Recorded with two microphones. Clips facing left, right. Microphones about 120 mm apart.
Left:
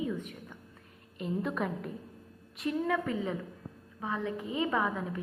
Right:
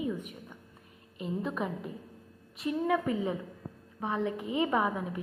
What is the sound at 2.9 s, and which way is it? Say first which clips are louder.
A woman's voice: right 2 dB; 15° right (ahead or behind).